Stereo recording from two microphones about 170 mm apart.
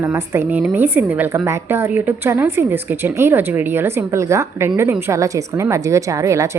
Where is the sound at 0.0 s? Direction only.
15° right (ahead or behind).